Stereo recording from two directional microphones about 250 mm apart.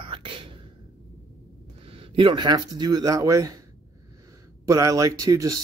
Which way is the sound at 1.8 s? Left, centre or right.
Right.